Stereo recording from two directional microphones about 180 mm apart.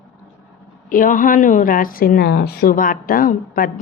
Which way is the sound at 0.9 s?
50° left (ahead or behind).